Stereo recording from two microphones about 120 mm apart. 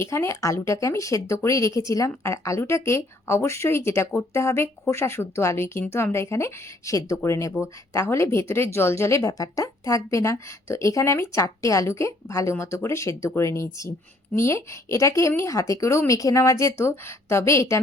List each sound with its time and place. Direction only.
0.0 s speech: 25° left (ahead or behind)